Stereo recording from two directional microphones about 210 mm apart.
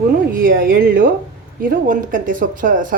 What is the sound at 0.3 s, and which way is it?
A woman's voice, 45° right (ahead or behind).